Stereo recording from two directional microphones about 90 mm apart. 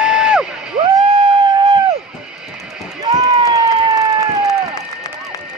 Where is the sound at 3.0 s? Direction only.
45° right (ahead or behind).